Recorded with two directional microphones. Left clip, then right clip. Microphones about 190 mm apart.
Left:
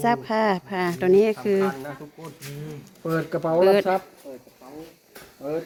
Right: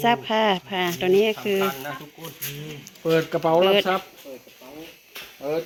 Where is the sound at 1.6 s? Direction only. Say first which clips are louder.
Right 1 dB; 30° right (ahead or behind).